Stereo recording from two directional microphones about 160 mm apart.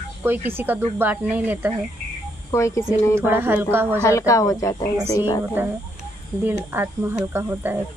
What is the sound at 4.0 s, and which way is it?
Speech, 20° left (ahead or behind).